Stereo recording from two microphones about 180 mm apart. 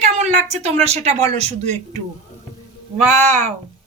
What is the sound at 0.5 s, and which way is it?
A woman's voice, 35° right (ahead or behind).